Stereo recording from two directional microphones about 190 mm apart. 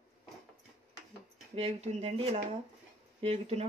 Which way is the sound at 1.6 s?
35° right (ahead or behind).